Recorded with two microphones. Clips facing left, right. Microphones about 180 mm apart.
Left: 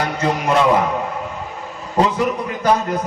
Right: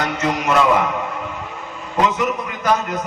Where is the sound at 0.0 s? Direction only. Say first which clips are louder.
Left 1 dB; 30° left (ahead or behind).